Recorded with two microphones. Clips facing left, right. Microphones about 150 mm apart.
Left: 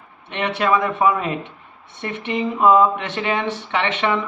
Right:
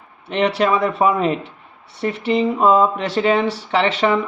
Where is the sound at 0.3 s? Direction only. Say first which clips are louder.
Right 3 dB; 35° right (ahead or behind).